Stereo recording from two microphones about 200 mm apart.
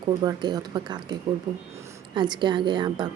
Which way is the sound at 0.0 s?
20° right (ahead or behind).